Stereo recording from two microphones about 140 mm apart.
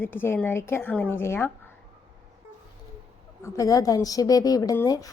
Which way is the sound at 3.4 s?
25° left (ahead or behind).